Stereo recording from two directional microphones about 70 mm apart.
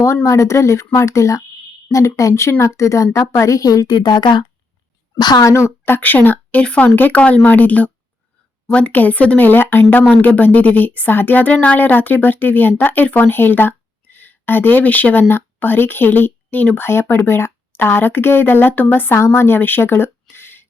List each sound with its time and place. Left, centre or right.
0.0 s a woman's voice: left
5.4 s speech: left
5.8 s a woman's voice: left